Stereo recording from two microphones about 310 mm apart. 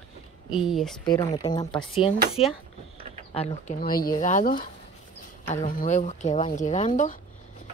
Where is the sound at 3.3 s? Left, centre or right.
Left.